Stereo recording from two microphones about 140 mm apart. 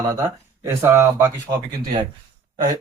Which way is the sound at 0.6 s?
20° right (ahead or behind).